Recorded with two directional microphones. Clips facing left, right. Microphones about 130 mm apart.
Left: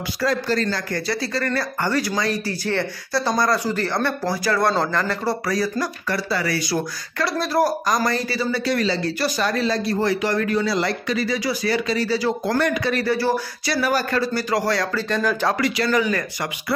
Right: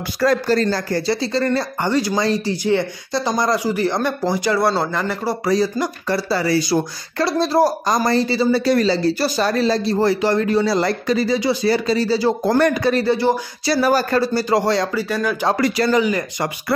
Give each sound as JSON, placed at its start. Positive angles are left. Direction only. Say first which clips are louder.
{"t": 0.2, "sound": "speech", "louder": "right 5 dB", "side_deg": -50}
{"t": 0.6, "sound": "speech", "louder": "right 5 dB", "side_deg": -35}
{"t": 2.6, "sound": "speech", "louder": "right 5 dB", "side_deg": -15}
{"t": 4.6, "sound": "speech", "louder": "right 2 dB", "side_deg": -10}
{"t": 12.9, "sound": "speech", "louder": "right 3 dB", "side_deg": -25}
{"t": 13.7, "sound": "speech", "louder": "right 4 dB", "side_deg": -35}
{"t": 15.0, "sound": "speech", "louder": "right 1 dB", "side_deg": -10}
{"t": 15.5, "sound": "speech", "louder": "right 4 dB", "side_deg": -35}
{"t": 15.9, "sound": "speech", "louder": "right 3 dB", "side_deg": -20}